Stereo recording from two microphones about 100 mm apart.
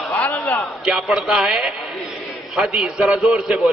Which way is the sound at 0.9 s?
Centre (ahead or behind).